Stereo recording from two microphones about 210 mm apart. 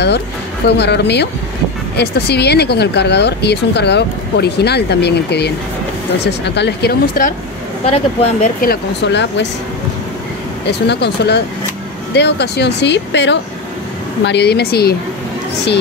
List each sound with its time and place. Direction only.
0.7 s speech: 55° left (ahead or behind)
7.8 s speech: 30° left (ahead or behind)
8.5 s speech: 50° left (ahead or behind)
10.7 s speech: 55° left (ahead or behind)